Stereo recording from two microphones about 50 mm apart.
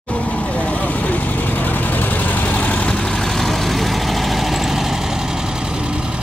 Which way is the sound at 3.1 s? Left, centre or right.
Centre.